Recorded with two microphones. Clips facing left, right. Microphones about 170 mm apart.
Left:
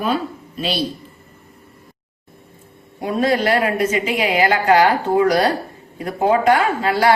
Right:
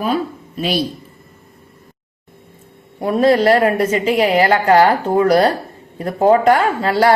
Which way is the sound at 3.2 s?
30° right (ahead or behind).